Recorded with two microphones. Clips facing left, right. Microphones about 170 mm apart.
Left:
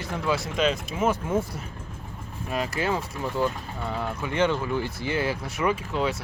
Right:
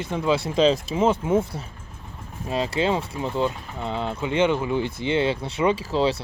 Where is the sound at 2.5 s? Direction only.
25° right (ahead or behind).